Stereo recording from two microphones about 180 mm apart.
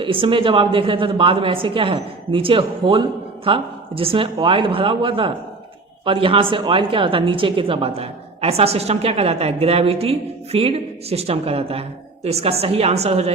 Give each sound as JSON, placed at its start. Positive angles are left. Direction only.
{"t": 0.0, "sound": "a woman's voice", "side_deg": -30}